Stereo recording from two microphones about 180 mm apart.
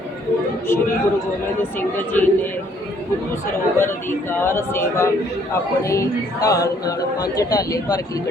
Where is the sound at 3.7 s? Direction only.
10° left (ahead or behind).